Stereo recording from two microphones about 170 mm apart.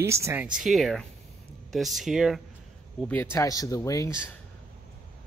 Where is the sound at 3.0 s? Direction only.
10° left (ahead or behind).